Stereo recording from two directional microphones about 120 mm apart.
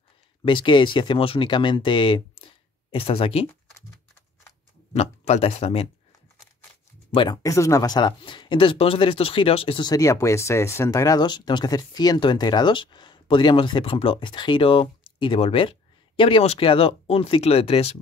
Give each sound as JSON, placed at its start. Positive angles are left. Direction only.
{"t": 0.5, "sound": "speech", "side_deg": 40}
{"t": 4.9, "sound": "speech", "side_deg": 65}
{"t": 7.4, "sound": "speech", "side_deg": 25}
{"t": 9.8, "sound": "speech", "side_deg": 30}